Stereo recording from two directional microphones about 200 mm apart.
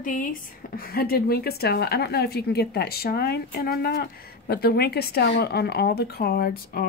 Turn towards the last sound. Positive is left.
turn(degrees=50)  # may be behind; listen again after turning